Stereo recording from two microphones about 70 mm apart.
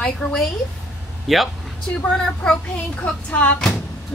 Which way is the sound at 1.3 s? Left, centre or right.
Centre.